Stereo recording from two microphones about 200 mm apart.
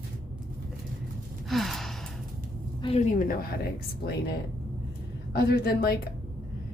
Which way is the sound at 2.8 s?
30° left (ahead or behind).